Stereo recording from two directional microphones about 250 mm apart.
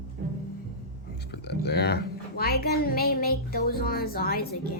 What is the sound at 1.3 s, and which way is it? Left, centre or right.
A woman's voice, left.